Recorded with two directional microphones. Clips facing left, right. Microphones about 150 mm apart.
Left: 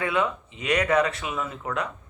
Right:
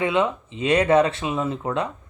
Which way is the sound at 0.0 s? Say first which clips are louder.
Right 4 dB; 25° right (ahead or behind).